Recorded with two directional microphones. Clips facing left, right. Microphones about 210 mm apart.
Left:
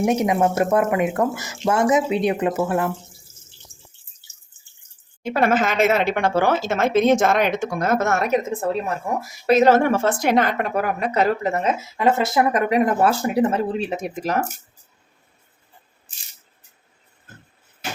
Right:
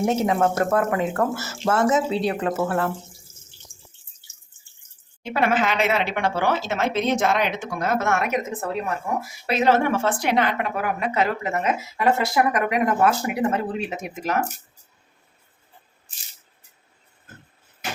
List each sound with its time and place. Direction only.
0.0 s speech: 15° left (ahead or behind)
5.2 s a woman's voice: 45° left (ahead or behind)